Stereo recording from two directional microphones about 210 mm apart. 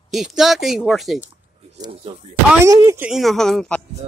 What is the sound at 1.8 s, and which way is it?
Speech, 25° right (ahead or behind).